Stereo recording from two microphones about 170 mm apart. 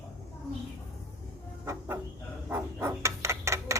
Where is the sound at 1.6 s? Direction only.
15° right (ahead or behind).